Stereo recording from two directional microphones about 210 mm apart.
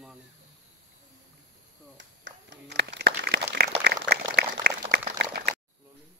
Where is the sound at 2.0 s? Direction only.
55° right (ahead or behind).